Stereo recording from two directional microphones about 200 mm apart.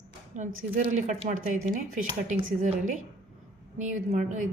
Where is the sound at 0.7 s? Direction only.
45° right (ahead or behind).